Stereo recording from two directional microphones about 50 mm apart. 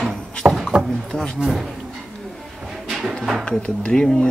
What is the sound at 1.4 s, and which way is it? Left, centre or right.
Speech, centre.